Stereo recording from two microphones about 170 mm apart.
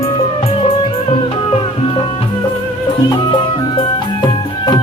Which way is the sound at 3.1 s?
25° left (ahead or behind).